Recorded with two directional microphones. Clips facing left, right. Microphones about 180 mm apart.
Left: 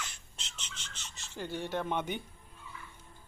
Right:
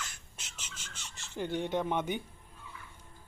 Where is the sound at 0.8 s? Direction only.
50° right (ahead or behind).